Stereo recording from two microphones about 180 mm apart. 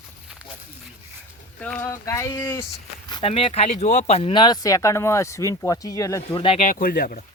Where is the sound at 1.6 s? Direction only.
10° left (ahead or behind).